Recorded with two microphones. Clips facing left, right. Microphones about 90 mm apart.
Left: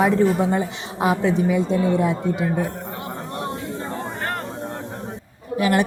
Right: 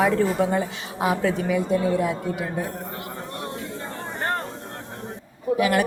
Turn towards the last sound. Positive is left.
turn(degrees=25)  # may be behind; listen again after turning